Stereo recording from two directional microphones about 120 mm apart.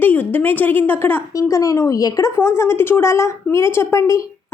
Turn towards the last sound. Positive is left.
turn(degrees=25)  # may be behind; listen again after turning